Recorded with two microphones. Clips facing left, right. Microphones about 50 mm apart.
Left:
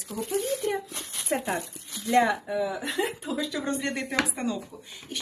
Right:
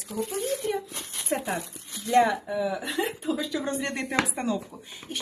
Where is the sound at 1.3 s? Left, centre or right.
Centre.